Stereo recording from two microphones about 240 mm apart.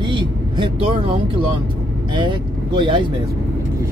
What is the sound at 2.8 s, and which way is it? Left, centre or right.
Speech, right.